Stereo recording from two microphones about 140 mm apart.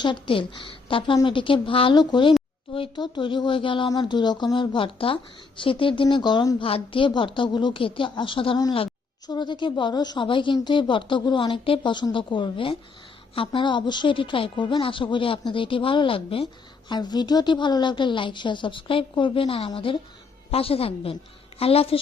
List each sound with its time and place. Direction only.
0.0 s speech: 35° left (ahead or behind)
6.6 s a woman's voice: 40° left (ahead or behind)